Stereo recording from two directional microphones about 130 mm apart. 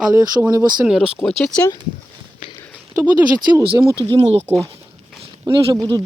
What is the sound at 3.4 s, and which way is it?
Speech, 35° right (ahead or behind).